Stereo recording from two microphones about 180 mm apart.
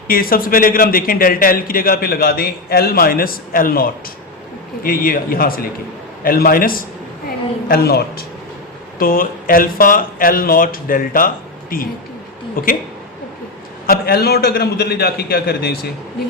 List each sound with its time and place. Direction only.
0.1 s a man's voice: 55° left (ahead or behind)
13.8 s a man's voice: 55° left (ahead or behind)